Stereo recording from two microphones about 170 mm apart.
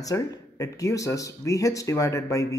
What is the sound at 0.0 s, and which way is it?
Speech, 20° left (ahead or behind).